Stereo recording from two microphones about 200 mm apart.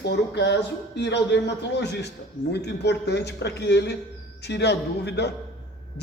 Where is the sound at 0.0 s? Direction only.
60° left (ahead or behind).